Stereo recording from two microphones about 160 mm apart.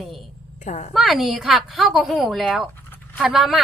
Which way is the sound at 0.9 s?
Centre (ahead or behind).